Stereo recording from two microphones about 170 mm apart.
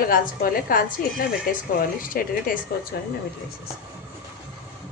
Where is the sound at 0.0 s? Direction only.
55° left (ahead or behind).